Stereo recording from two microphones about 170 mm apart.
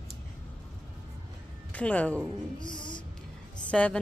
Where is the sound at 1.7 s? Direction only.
10° left (ahead or behind).